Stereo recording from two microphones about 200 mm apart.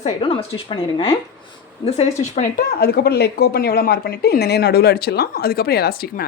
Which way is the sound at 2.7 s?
50° left (ahead or behind).